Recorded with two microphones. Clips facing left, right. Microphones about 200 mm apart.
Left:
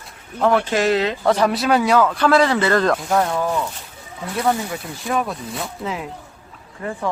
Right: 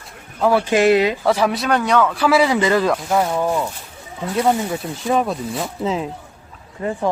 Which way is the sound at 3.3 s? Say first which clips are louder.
Right 2 dB; 15° right (ahead or behind).